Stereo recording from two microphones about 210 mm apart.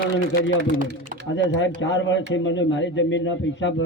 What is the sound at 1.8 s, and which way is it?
A man's voice, 60° left (ahead or behind).